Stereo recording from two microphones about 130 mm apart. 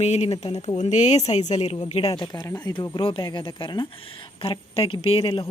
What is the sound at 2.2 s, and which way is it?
Speech, 25° left (ahead or behind).